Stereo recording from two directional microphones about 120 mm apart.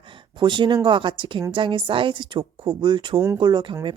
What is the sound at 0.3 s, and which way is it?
A woman's voice, 40° right (ahead or behind).